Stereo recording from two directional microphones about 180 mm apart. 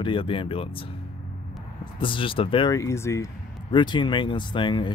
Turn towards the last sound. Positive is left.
turn(degrees=25)  # may be behind; listen again after turning